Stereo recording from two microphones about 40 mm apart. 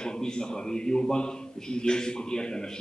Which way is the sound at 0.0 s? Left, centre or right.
Centre.